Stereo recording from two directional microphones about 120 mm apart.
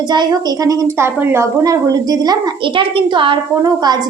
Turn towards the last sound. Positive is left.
turn(degrees=-35)  # may be behind; listen again after turning